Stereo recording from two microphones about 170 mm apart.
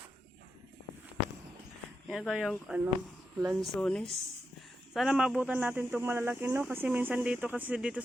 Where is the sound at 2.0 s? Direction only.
Centre (ahead or behind).